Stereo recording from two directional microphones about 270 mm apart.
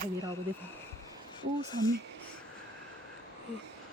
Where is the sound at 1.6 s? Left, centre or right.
Centre.